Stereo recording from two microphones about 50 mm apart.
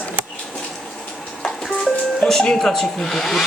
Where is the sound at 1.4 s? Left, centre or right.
Centre.